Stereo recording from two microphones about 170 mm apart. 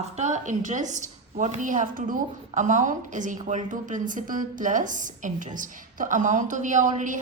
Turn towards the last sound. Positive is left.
turn(degrees=-50)  # may be behind; listen again after turning